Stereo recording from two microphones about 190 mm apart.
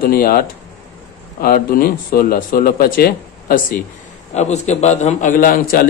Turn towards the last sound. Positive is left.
turn(degrees=45)  # may be behind; listen again after turning